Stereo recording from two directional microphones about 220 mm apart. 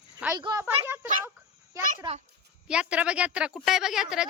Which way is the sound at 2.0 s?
20° right (ahead or behind).